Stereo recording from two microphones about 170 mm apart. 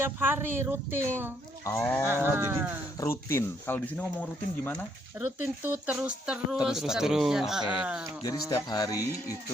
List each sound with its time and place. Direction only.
0.0 s speech: 15° right (ahead or behind)
1.6 s speech: 15° left (ahead or behind)
2.0 s speech: 10° right (ahead or behind)
3.0 s speech: 15° left (ahead or behind)
5.1 s speech: 10° right (ahead or behind)
8.2 s speech: 20° left (ahead or behind)